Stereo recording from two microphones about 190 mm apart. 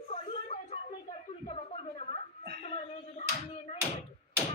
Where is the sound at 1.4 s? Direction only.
35° left (ahead or behind).